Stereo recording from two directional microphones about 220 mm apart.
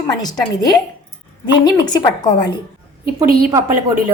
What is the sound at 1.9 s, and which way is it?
Speech, 20° left (ahead or behind).